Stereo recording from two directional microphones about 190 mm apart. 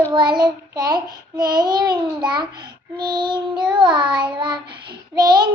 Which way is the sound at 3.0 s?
25° right (ahead or behind).